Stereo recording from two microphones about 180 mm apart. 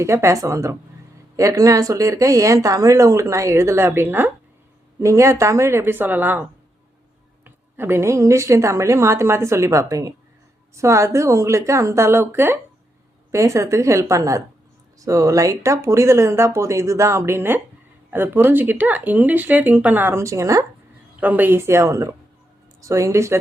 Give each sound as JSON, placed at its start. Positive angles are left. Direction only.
{"t": 0.0, "sound": "speech", "side_deg": -15}
{"t": 7.4, "sound": "speech", "side_deg": -10}